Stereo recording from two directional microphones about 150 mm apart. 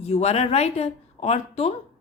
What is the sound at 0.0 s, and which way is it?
A woman's voice, 45° left (ahead or behind).